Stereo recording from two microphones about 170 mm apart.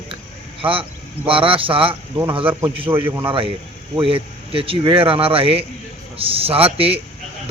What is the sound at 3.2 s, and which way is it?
Speech, 30° right (ahead or behind).